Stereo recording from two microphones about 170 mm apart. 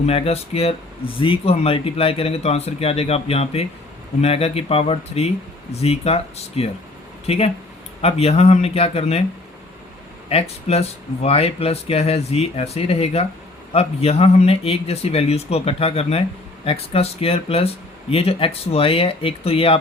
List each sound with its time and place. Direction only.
0.0 s speech: 35° left (ahead or behind)
10.2 s speech: 35° left (ahead or behind)